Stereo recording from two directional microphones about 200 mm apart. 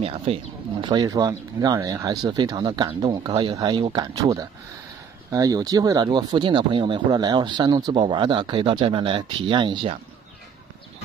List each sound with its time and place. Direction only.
0.0 s speech: 30° right (ahead or behind)